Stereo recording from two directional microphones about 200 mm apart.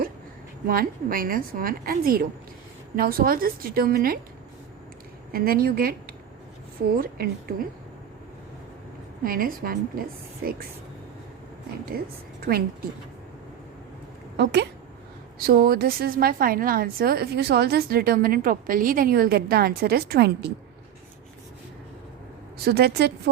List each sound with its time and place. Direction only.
0.7 s a woman's voice: 45° right (ahead or behind)
5.3 s a woman's voice: 45° right (ahead or behind)
9.2 s a woman's voice: 45° right (ahead or behind)
11.9 s a woman's voice: 50° right (ahead or behind)
14.3 s a woman's voice: 60° right (ahead or behind)
15.4 s a woman's voice: 45° right (ahead or behind)
22.5 s a woman's voice: 50° right (ahead or behind)